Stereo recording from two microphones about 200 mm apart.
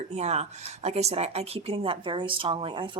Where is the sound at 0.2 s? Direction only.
30° right (ahead or behind).